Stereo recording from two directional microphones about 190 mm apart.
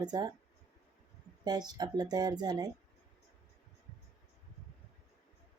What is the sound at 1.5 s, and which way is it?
Speech, 20° right (ahead or behind).